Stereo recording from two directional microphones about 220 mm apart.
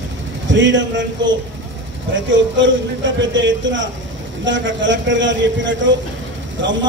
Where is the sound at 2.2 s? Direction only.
55° right (ahead or behind).